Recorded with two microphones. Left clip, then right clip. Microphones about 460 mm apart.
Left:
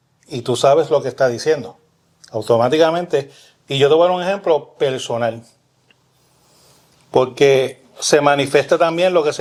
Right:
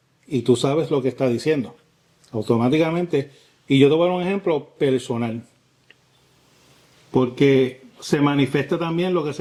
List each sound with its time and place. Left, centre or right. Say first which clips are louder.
0.3 s a man's voice: left 6 dB; left
7.1 s speech: left 5 dB; left